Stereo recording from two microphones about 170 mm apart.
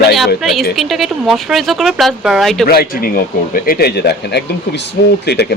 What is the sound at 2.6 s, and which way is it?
Speech, 60° left (ahead or behind).